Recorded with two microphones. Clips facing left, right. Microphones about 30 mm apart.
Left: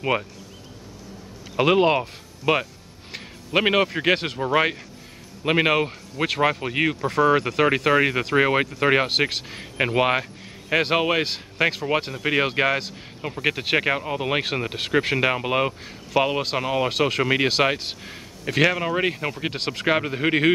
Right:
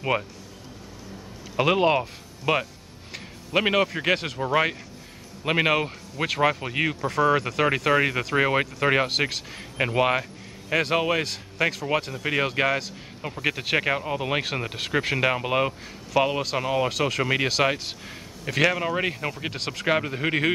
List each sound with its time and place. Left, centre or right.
0.0 s speech: centre
1.6 s speech: centre